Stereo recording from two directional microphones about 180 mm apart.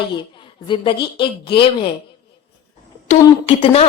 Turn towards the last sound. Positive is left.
turn(degrees=35)  # may be behind; listen again after turning